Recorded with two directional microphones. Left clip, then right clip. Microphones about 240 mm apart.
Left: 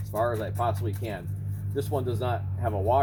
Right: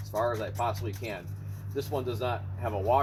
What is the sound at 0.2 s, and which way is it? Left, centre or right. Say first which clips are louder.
Speech: left 2 dB; centre.